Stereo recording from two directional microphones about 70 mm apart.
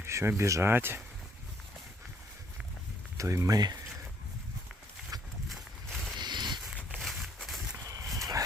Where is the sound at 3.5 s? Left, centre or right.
Right.